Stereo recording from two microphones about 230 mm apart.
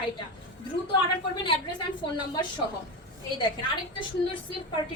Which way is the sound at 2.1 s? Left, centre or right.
Centre.